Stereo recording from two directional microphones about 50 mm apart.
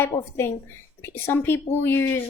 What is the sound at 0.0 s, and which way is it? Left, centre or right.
A woman's voice, left.